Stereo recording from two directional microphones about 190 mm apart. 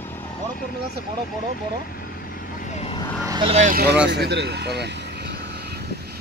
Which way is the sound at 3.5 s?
40° right (ahead or behind).